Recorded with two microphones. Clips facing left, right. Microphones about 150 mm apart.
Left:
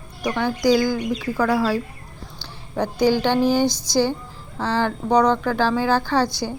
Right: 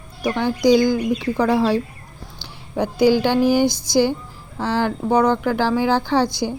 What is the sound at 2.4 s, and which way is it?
Speech, 10° right (ahead or behind).